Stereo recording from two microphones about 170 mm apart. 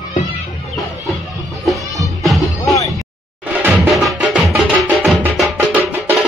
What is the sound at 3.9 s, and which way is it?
Music, centre (ahead or behind).